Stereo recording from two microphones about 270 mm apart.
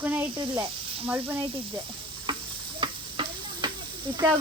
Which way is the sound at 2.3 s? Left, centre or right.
Centre.